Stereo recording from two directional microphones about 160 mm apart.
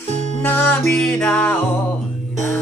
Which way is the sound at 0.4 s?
10° left (ahead or behind).